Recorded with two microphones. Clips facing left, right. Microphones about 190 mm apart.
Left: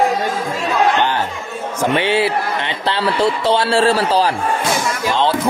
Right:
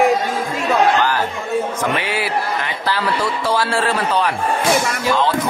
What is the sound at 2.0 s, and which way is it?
Speech, 25° left (ahead or behind).